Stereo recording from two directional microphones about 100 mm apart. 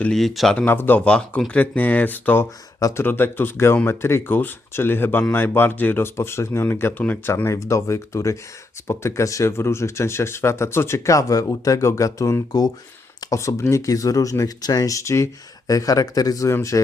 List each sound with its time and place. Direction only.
0.1 s speech: centre (ahead or behind)
0.5 s speech: 20° left (ahead or behind); by 12.7 s 40° left (ahead or behind)
13.3 s speech: 30° left (ahead or behind)